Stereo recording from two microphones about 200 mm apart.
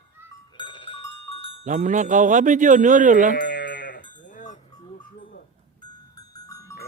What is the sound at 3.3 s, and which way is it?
Sheep, 45° left (ahead or behind).